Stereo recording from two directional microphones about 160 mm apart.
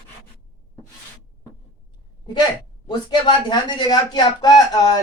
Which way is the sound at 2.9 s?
30° left (ahead or behind).